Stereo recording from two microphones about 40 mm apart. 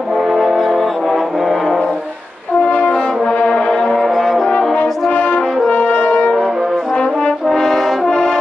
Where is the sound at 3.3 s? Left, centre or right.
Left.